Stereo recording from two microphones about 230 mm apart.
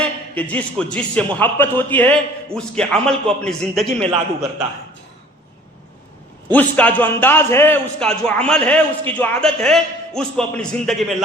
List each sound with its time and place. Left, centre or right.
0.0 s a man's voice: centre
4.0 s a man's voice: right
6.5 s a man's voice: centre